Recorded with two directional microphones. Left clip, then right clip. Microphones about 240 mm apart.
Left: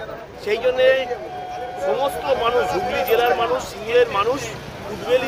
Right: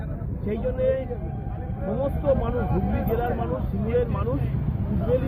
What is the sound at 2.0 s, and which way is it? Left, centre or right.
Speech, left.